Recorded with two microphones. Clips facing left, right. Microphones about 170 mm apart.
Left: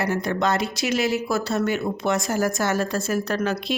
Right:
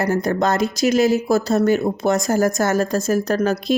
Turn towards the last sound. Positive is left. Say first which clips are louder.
# right 6 dB
turn(degrees=-40)  # may be behind; listen again after turning